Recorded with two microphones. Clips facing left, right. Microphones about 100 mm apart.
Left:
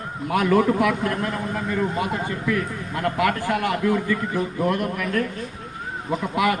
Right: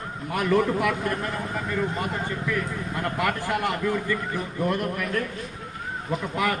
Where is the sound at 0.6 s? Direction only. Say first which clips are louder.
Left 4 dB; centre (ahead or behind).